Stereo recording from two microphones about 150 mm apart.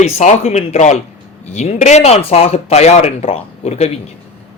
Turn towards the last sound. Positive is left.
turn(degrees=45)  # may be behind; listen again after turning